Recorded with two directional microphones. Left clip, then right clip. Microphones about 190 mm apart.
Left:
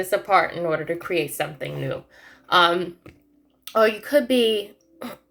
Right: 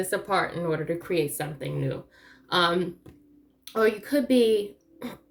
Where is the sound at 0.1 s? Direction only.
15° right (ahead or behind).